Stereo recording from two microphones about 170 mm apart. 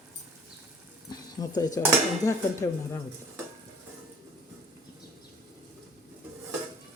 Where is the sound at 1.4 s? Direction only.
25° left (ahead or behind).